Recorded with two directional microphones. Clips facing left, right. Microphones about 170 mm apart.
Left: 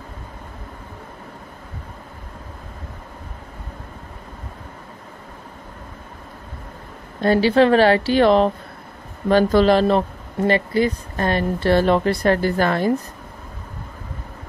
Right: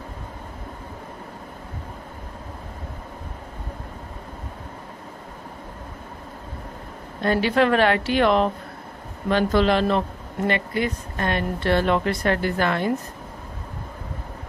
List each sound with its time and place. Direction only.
7.2 s speech: 30° left (ahead or behind)